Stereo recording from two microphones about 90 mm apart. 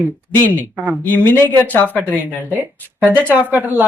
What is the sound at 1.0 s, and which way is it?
Speech, 20° left (ahead or behind).